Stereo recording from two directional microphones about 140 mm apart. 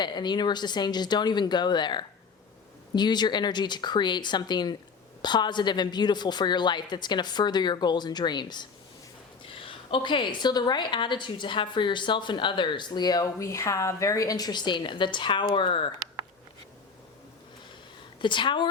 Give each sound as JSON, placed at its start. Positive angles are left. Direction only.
{"t": 0.0, "sound": "a woman's voice", "side_deg": 30}
{"t": 18.2, "sound": "a woman's voice", "side_deg": 35}